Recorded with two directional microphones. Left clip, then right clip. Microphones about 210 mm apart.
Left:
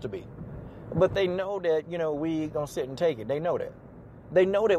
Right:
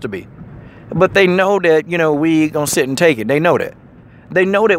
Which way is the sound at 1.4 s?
65° right (ahead or behind).